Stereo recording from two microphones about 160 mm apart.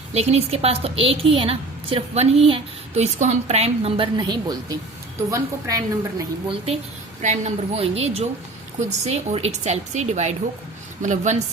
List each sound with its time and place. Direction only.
0.1 s a woman's voice: 40° right (ahead or behind); by 6.2 s 20° right (ahead or behind)
7.2 s a woman's voice: 45° right (ahead or behind)